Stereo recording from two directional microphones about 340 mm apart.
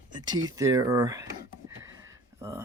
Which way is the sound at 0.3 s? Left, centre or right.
Centre.